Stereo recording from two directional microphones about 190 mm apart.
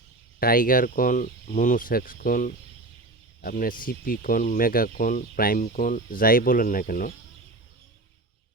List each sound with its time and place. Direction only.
0.3 s speech: 50° left (ahead or behind)